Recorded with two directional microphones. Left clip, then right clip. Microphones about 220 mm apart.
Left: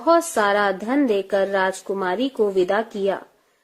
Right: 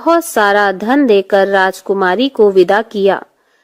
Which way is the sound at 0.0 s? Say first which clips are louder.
Right 6 dB; 40° right (ahead or behind).